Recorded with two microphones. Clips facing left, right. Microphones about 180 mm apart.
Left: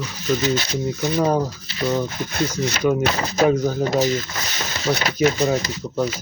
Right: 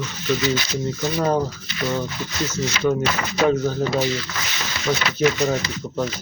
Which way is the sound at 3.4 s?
10° left (ahead or behind).